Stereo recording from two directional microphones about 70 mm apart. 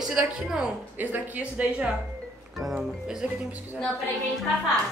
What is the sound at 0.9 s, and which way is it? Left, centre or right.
A woman's voice, right.